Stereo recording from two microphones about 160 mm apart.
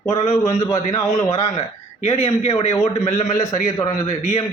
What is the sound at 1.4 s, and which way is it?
A man's voice, 40° left (ahead or behind).